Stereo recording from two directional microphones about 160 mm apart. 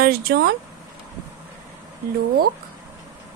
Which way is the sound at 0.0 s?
75° right (ahead or behind).